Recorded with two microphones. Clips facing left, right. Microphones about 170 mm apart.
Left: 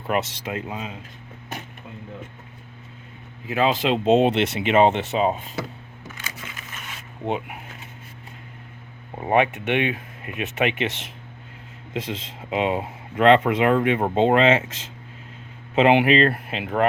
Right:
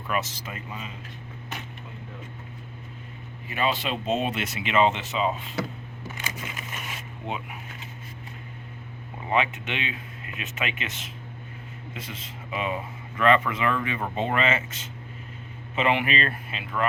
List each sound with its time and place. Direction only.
0.1 s speech: 65° left (ahead or behind); by 0.9 s 90° left
3.5 s speech: 90° left
4.7 s speech: 50° left (ahead or behind)
7.3 s speech: 60° left (ahead or behind)
9.1 s speech: 50° left (ahead or behind)
11.9 s speech: 90° left; by 13.7 s 75° left (ahead or behind)
14.2 s speech: 85° left; by 16.8 s 65° left (ahead or behind)